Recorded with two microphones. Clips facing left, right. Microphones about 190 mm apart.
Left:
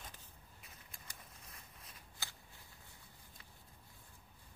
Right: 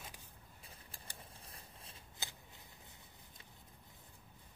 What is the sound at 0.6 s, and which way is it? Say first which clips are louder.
Shuffling cards: right 3 dB; 30° right (ahead or behind).